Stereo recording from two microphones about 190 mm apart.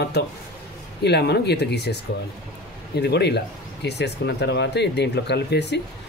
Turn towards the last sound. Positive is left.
turn(degrees=60)  # may be behind; listen again after turning